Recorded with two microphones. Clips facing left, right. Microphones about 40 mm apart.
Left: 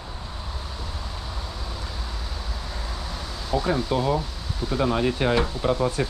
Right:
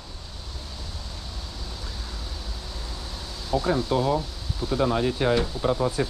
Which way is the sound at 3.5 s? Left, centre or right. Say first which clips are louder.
Even; centre.